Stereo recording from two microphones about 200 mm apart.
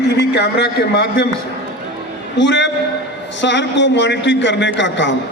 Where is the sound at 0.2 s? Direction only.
55° left (ahead or behind).